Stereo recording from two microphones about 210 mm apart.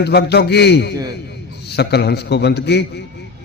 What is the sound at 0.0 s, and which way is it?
A man's voice, 50° left (ahead or behind).